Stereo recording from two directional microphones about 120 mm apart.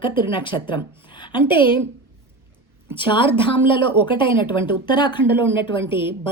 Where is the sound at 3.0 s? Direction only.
45° left (ahead or behind).